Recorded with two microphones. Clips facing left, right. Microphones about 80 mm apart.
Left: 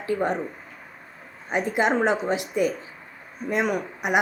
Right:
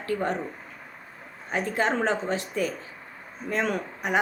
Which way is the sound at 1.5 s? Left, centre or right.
Centre.